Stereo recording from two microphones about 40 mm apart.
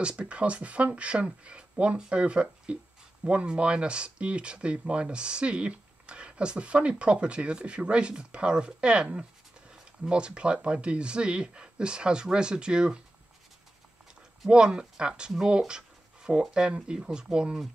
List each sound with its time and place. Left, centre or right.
0.0 s speech: right
14.5 s speech: right